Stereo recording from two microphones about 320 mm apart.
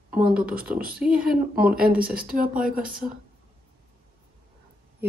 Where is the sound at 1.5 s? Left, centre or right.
Right.